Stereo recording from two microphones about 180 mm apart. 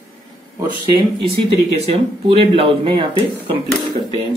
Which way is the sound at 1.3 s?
35° right (ahead or behind).